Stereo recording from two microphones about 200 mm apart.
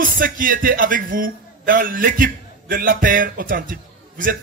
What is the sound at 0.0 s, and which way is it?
A man's voice, 45° right (ahead or behind).